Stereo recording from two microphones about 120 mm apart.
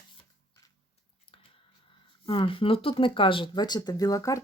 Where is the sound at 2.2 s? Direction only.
45° left (ahead or behind).